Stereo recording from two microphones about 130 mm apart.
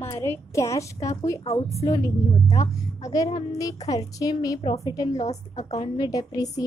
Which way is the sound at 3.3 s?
55° left (ahead or behind).